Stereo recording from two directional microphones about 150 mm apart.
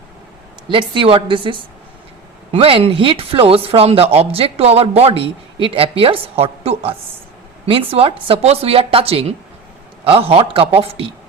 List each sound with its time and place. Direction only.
0.7 s speech: 35° right (ahead or behind)